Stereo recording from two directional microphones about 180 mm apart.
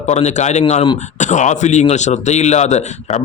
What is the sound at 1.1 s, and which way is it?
A man's voice, 40° left (ahead or behind).